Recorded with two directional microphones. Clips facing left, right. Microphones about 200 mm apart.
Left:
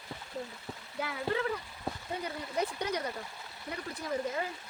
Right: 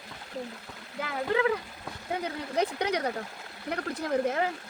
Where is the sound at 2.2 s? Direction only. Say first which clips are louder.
Right 5 dB; 70° right (ahead or behind).